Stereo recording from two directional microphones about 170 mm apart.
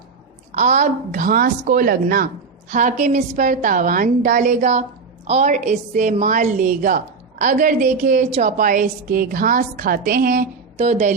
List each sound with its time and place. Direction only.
0.5 s a woman's voice: 45° right (ahead or behind)
10.8 s a woman's voice: 40° right (ahead or behind)